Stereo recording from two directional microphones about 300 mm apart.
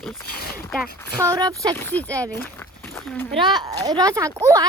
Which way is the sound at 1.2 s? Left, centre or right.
Centre.